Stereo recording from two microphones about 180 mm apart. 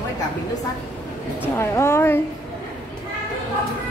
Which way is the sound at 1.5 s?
15° left (ahead or behind).